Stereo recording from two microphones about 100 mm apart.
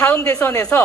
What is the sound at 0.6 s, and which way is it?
Speech, 15° left (ahead or behind).